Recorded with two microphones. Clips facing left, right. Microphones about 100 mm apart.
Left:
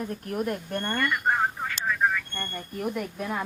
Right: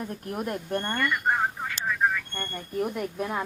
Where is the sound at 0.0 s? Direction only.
25° right (ahead or behind).